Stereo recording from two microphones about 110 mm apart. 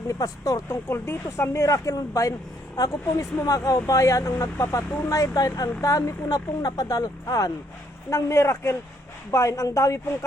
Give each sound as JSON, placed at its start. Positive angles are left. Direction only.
{"t": 0.1, "sound": "speech", "side_deg": 30}